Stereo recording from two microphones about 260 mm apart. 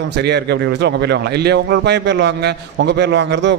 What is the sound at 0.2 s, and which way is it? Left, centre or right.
Speech, right.